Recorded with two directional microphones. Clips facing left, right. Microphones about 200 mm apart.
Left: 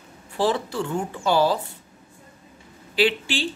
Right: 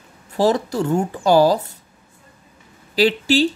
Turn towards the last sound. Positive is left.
turn(degrees=-40)  # may be behind; listen again after turning